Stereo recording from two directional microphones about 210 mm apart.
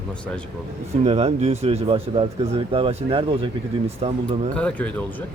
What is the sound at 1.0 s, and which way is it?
Speech, 30° right (ahead or behind).